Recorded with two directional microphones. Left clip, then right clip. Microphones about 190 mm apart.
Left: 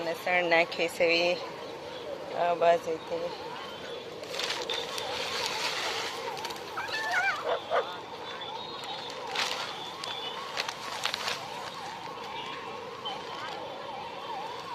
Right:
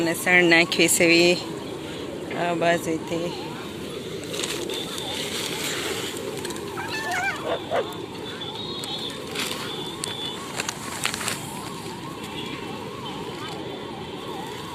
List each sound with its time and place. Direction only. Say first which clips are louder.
0.0 s speech: right 9 dB; centre (ahead or behind)
2.4 s speech: right 2 dB; 5° left (ahead or behind)
6.9 s dog: right 2 dB; 15° left (ahead or behind)